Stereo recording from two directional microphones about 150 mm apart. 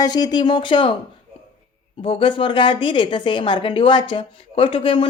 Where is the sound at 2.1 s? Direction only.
35° left (ahead or behind).